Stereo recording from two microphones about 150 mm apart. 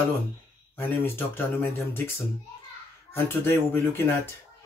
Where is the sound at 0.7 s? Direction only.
15° left (ahead or behind).